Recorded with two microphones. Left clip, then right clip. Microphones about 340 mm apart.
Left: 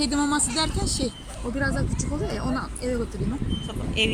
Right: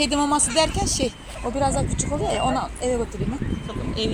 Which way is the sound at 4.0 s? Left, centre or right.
Centre.